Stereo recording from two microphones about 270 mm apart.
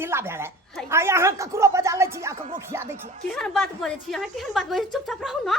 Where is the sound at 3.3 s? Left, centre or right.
Centre.